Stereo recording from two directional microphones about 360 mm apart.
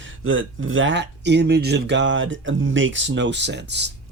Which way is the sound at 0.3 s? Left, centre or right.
Right.